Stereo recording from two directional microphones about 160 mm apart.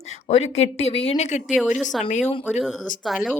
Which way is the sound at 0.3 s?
40° left (ahead or behind).